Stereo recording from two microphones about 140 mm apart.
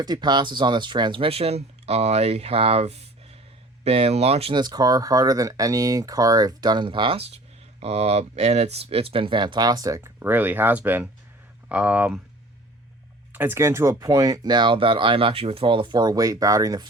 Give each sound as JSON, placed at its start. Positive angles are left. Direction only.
{"t": 0.0, "sound": "speech", "side_deg": -30}
{"t": 4.5, "sound": "speech", "side_deg": -30}
{"t": 7.8, "sound": "speech", "side_deg": -50}
{"t": 13.3, "sound": "speech", "side_deg": -15}